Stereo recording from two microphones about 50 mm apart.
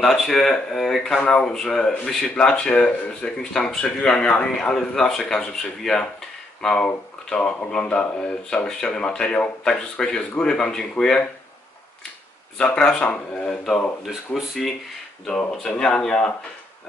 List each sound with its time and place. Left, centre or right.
0.0 s speech: centre
1.2 s speech: left
1.5 s speech: centre
12.5 s speech: centre
14.0 s speech: centre
15.2 s speech: centre